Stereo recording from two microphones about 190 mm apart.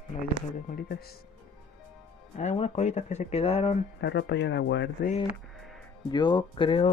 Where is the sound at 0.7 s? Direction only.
55° left (ahead or behind).